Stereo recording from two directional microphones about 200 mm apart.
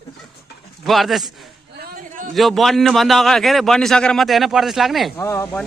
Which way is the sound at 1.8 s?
40° right (ahead or behind).